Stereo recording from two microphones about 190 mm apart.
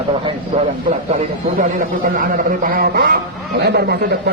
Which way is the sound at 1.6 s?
45° right (ahead or behind).